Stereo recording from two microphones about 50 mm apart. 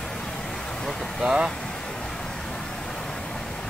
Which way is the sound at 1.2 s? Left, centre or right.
Centre.